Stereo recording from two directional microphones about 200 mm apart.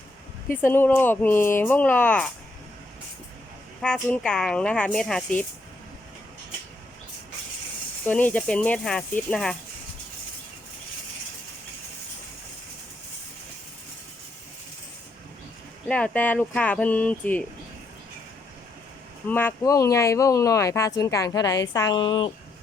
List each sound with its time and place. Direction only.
0.4 s speech: 10° left (ahead or behind)
3.8 s speech: centre (ahead or behind)
8.0 s speech: 5° left (ahead or behind)
15.9 s speech: 5° left (ahead or behind)
19.3 s speech: 10° left (ahead or behind)